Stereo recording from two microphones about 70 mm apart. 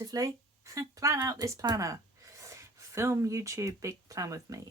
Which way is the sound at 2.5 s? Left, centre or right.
Right.